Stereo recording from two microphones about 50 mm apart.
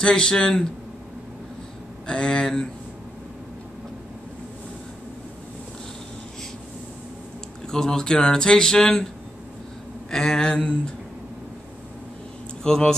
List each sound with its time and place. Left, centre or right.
0.0 s speech: centre
2.0 s speech: centre
7.7 s speech: centre
10.1 s speech: centre
12.6 s speech: centre